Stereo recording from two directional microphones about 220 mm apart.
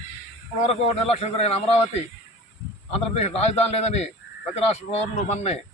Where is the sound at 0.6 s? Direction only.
30° left (ahead or behind).